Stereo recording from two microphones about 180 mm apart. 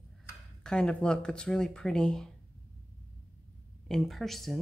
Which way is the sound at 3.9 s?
Centre (ahead or behind).